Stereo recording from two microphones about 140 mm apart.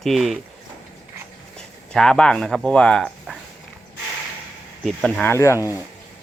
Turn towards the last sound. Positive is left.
turn(degrees=20)  # may be behind; listen again after turning